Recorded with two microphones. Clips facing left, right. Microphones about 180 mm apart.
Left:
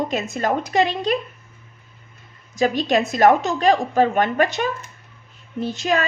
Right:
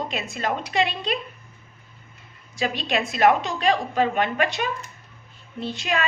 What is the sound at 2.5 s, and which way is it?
A woman's voice, 45° left (ahead or behind).